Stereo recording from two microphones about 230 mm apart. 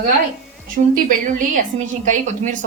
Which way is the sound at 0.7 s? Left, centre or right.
Right.